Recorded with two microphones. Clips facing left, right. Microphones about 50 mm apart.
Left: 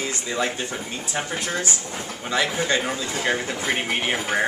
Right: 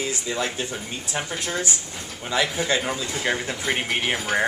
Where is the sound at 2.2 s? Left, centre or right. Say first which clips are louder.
Even; centre.